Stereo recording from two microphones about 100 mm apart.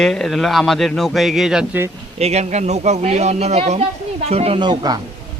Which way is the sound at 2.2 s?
90° right.